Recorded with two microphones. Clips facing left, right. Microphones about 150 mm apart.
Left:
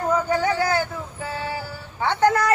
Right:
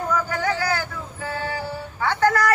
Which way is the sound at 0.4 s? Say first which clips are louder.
Left 3 dB; 25° left (ahead or behind).